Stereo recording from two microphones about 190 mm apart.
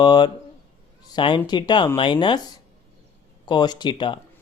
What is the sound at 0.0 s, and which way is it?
Speech, 25° left (ahead or behind).